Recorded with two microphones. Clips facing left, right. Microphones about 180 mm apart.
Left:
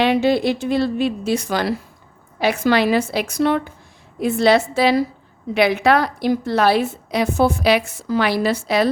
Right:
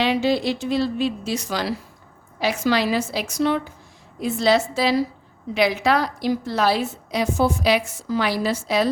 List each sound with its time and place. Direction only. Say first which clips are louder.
0.0 s a woman's voice: left 4 dB; 55° left (ahead or behind)